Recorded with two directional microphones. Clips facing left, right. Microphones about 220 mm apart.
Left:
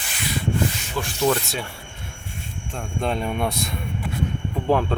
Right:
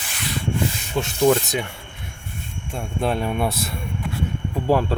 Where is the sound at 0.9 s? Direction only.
20° right (ahead or behind).